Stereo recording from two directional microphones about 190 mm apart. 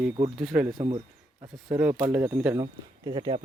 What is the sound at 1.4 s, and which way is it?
Speech, 20° right (ahead or behind).